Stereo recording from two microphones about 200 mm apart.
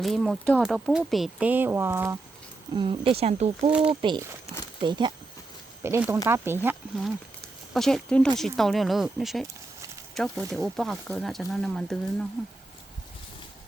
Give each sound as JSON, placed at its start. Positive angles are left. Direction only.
{"t": 0.0, "sound": "speech", "side_deg": 0}
{"t": 2.7, "sound": "speech", "side_deg": -25}
{"t": 3.7, "sound": "speech", "side_deg": -5}
{"t": 4.0, "sound": "speech", "side_deg": -20}
{"t": 7.7, "sound": "speech", "side_deg": 0}